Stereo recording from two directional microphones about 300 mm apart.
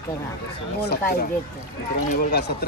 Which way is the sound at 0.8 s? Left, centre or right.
Left.